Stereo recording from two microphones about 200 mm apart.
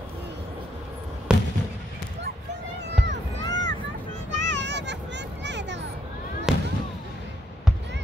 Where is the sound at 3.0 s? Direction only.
65° right (ahead or behind).